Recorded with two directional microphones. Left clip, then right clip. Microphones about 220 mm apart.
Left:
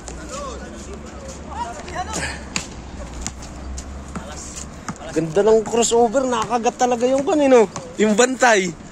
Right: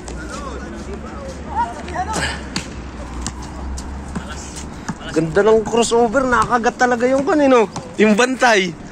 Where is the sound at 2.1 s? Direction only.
5° left (ahead or behind).